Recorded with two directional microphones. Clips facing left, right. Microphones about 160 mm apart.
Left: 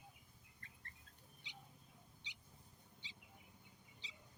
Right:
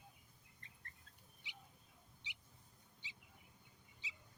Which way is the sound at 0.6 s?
20° right (ahead or behind).